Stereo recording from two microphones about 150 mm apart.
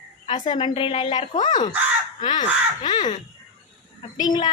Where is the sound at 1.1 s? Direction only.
55° left (ahead or behind).